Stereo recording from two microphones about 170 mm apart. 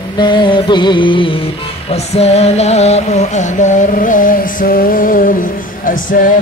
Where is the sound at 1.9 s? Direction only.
40° left (ahead or behind).